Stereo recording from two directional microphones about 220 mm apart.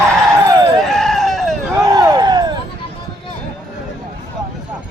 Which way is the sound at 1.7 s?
15° right (ahead or behind).